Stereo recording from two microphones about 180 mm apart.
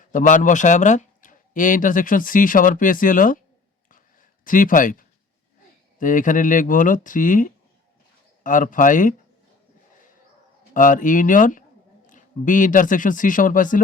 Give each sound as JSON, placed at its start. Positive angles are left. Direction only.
{"t": 0.0, "sound": "speech", "side_deg": 45}
{"t": 4.4, "sound": "speech", "side_deg": 50}
{"t": 10.8, "sound": "speech", "side_deg": 45}